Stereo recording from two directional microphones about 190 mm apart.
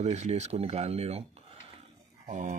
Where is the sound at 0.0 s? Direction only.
35° right (ahead or behind).